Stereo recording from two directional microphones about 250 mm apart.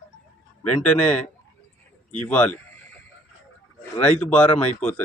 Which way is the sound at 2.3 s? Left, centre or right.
Centre.